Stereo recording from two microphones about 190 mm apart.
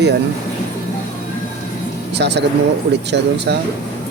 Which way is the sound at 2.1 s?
65° right (ahead or behind).